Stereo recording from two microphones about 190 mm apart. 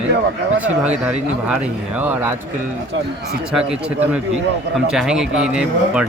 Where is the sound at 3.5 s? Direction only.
5° right (ahead or behind).